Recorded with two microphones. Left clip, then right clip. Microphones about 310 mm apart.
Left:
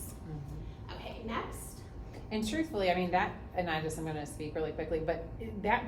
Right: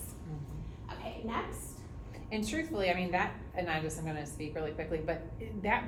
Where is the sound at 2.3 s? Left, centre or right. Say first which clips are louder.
Left 1 dB; left.